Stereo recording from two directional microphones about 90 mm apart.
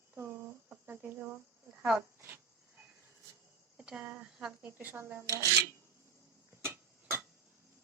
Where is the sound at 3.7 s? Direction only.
10° right (ahead or behind).